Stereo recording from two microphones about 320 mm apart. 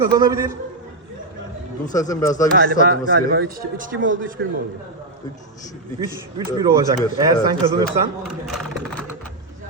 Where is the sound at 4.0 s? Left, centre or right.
Right.